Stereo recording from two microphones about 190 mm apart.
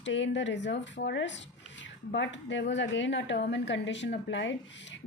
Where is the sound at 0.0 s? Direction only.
75° left (ahead or behind).